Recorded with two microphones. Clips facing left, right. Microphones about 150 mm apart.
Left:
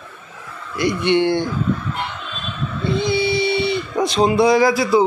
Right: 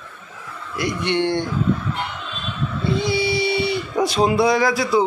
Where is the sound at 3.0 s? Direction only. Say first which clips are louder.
Left 3 dB; 10° right (ahead or behind).